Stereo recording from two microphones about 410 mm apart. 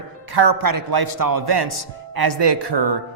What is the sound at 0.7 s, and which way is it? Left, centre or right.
A man's voice, right.